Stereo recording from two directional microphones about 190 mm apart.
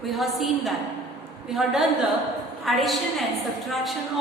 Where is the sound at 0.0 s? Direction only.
Centre (ahead or behind).